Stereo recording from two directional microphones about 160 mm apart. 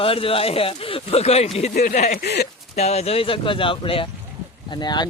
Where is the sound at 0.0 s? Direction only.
35° left (ahead or behind).